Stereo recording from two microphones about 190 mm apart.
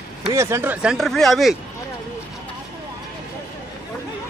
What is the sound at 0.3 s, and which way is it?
Speech, 15° right (ahead or behind).